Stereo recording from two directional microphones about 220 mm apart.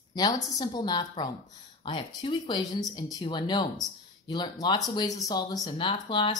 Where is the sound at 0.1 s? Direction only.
20° left (ahead or behind).